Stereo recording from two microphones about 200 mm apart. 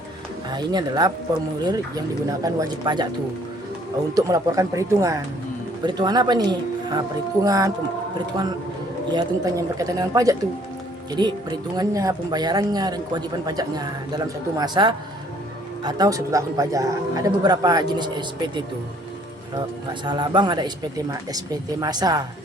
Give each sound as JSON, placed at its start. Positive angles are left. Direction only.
{"t": 0.5, "sound": "speech", "side_deg": -20}
{"t": 4.1, "sound": "a woman's voice", "side_deg": -15}
{"t": 9.1, "sound": "a woman's voice", "side_deg": -15}